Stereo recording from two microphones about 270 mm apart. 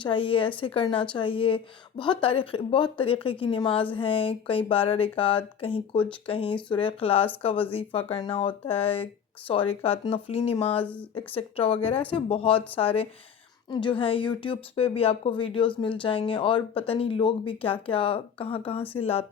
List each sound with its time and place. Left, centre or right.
0.0 s a woman's voice: centre